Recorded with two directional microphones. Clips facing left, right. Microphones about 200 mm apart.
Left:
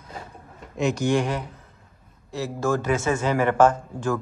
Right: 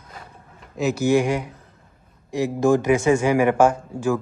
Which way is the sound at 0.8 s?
5° right (ahead or behind).